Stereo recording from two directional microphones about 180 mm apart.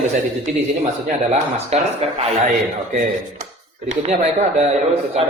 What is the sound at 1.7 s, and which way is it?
Speech, 35° right (ahead or behind).